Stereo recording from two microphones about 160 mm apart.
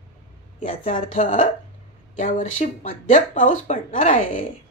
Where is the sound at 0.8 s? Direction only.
50° left (ahead or behind).